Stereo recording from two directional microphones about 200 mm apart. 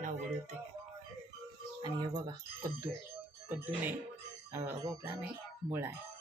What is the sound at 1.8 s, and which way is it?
Speech, 20° right (ahead or behind).